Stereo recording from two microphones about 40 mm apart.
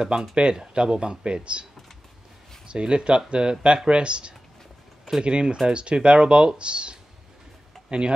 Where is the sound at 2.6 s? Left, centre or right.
Right.